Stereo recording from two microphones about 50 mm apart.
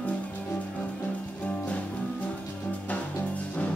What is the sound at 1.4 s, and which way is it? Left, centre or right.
Music, left.